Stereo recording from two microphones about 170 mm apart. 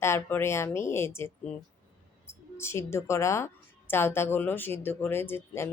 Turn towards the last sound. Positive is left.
turn(degrees=15)  # may be behind; listen again after turning